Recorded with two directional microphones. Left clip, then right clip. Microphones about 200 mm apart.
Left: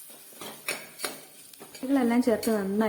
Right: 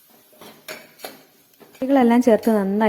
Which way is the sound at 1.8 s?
25° right (ahead or behind).